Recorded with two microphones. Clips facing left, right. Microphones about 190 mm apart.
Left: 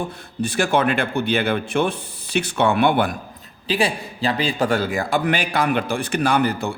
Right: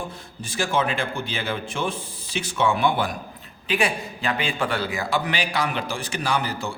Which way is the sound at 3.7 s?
30° left (ahead or behind).